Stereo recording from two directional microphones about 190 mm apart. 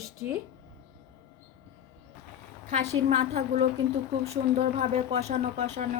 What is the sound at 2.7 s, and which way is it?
Speech, 35° right (ahead or behind).